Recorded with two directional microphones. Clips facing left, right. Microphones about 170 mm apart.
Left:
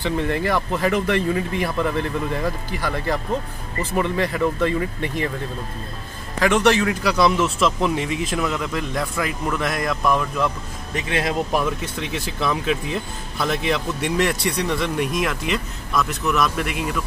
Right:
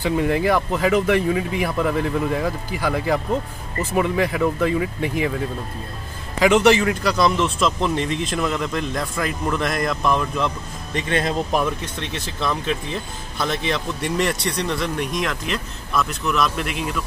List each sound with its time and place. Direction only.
0.0 s speech: 10° right (ahead or behind)
6.4 s speech: 10° right (ahead or behind)